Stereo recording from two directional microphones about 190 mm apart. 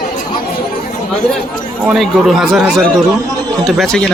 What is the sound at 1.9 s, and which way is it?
Speech, centre (ahead or behind).